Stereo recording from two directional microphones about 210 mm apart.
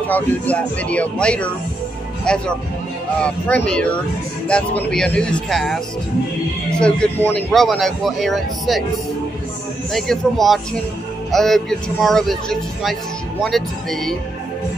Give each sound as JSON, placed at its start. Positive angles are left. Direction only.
{"t": 0.1, "sound": "a man's voice", "side_deg": 5}
{"t": 6.8, "sound": "a man's voice", "side_deg": 5}
{"t": 9.9, "sound": "a man's voice", "side_deg": 0}